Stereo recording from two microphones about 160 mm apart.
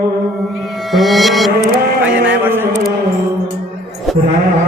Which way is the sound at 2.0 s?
10° right (ahead or behind).